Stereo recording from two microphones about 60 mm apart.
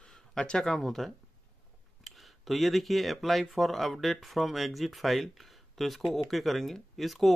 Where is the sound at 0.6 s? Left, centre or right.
Centre.